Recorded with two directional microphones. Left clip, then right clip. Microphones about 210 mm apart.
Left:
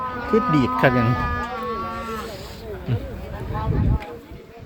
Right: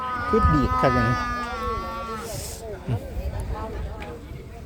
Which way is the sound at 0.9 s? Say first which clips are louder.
Left 1 dB; 45° right (ahead or behind).